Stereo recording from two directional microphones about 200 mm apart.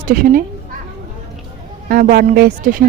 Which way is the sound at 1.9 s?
45° right (ahead or behind).